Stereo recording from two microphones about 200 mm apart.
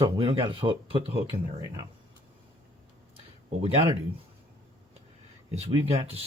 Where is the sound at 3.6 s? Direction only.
30° right (ahead or behind).